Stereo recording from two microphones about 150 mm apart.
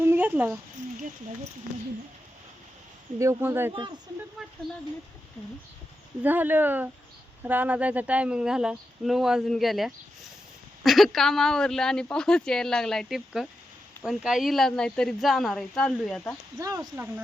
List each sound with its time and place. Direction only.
0.0 s a sound: 15° right (ahead or behind)
3.2 s speech: 20° right (ahead or behind)
3.7 s speech: 30° right (ahead or behind)
4.4 s speech: centre (ahead or behind)
6.2 s speech: 10° right (ahead or behind); by 16.2 s 5° left (ahead or behind)
16.6 s speech: 25° right (ahead or behind)